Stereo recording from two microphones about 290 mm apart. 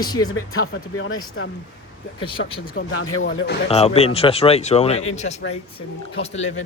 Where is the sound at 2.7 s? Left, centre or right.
Left.